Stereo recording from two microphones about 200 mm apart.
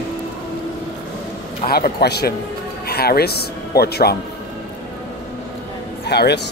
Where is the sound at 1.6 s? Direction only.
50° left (ahead or behind).